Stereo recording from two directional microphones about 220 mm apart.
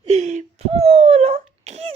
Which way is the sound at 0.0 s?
30° right (ahead or behind).